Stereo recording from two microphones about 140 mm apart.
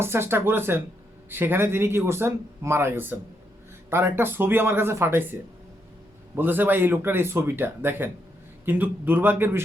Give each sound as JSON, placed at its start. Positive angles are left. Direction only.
{"t": 0.0, "sound": "speech", "side_deg": -15}